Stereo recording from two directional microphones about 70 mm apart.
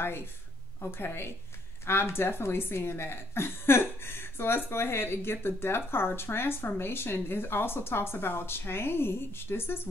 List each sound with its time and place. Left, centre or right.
0.0 s speech: left